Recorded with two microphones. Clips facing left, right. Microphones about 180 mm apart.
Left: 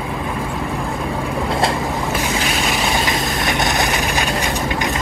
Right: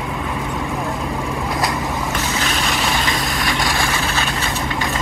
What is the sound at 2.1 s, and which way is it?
Boat, 10° left (ahead or behind).